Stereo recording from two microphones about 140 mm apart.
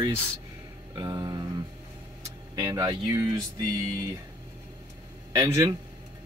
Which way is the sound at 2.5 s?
25° right (ahead or behind).